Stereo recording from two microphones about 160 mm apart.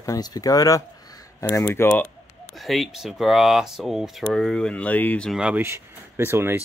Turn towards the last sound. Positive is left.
turn(degrees=-15)  # may be behind; listen again after turning